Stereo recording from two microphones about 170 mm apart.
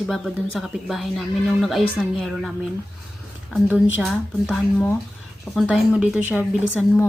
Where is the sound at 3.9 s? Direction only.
Centre (ahead or behind).